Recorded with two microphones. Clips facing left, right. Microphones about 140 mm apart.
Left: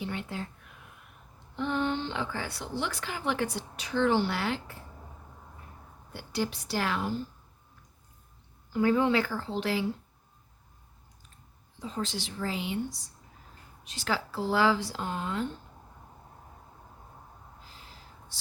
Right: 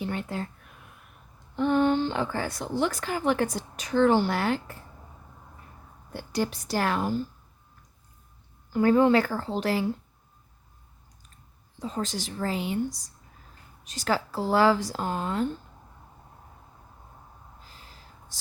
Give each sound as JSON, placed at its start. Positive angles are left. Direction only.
{"t": 0.0, "sound": "a sound", "side_deg": -45}
{"t": 1.5, "sound": "a woman's voice", "side_deg": -50}
{"t": 6.1, "sound": "speech", "side_deg": -45}
{"t": 8.7, "sound": "speech", "side_deg": -45}
{"t": 11.8, "sound": "speech", "side_deg": -45}